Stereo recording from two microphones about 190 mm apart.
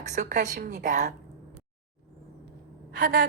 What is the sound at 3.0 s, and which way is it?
Speech, 50° right (ahead or behind).